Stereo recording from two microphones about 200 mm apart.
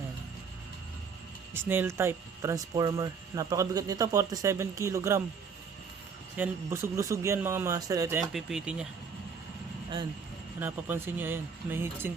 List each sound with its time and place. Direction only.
1.5 s speech: 10° right (ahead or behind)
6.3 s speech: 10° right (ahead or behind)
8.2 s speech: centre (ahead or behind)
10.6 s speech: 10° right (ahead or behind)